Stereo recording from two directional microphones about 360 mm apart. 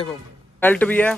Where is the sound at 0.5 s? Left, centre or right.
Centre.